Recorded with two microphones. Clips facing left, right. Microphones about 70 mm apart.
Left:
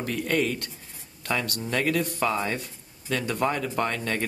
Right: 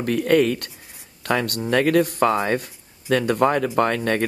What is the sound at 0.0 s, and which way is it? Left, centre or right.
A man's voice, right.